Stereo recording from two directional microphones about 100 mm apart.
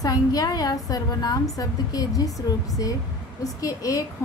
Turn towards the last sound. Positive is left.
turn(degrees=35)  # may be behind; listen again after turning